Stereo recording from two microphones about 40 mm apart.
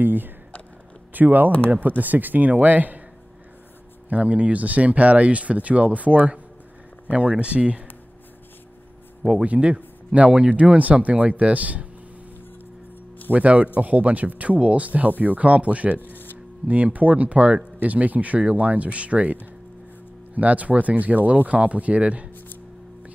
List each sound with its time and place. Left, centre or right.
0.0 s speech: right
4.1 s speech: right
9.3 s speech: right
9.8 s a sound: right
10.5 s speech: right
13.3 s speech: right
20.3 s speech: right